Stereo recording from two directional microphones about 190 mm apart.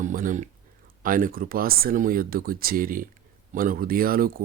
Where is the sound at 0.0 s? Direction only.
45° right (ahead or behind).